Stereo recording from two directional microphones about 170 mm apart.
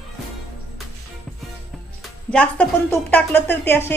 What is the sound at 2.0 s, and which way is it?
Speech, 5° left (ahead or behind).